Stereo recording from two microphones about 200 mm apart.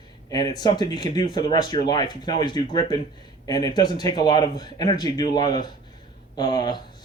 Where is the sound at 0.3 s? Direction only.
20° left (ahead or behind).